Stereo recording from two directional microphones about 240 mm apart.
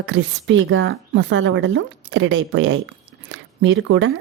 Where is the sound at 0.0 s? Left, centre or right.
Right.